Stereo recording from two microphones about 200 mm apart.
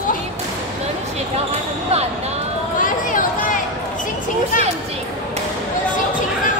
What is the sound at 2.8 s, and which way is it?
Chatter, 40° left (ahead or behind).